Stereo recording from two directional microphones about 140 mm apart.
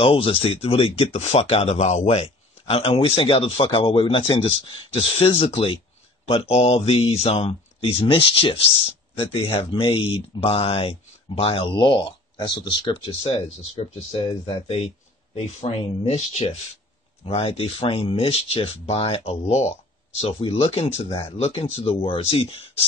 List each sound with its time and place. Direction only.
0.0 s speech: 40° left (ahead or behind)